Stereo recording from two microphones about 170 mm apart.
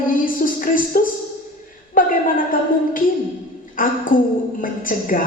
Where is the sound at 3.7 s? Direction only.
55° left (ahead or behind).